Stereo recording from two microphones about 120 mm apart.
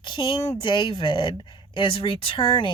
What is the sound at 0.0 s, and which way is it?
Speech, 40° left (ahead or behind).